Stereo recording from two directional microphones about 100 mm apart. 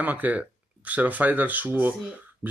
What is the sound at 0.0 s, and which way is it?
Speech, 15° right (ahead or behind).